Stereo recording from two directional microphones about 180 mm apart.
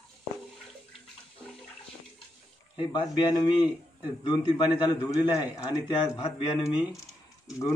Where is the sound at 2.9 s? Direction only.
25° left (ahead or behind).